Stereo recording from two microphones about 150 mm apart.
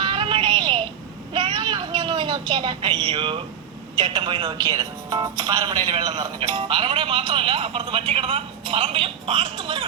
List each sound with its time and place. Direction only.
0.0 s music: 35° right (ahead or behind)
1.3 s a sound: 30° right (ahead or behind)
3.9 s speech: 30° right (ahead or behind)
6.1 s speech: 40° right (ahead or behind)